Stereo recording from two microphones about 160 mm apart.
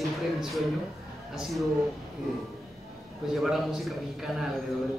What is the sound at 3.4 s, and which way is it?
A man's voice, centre (ahead or behind).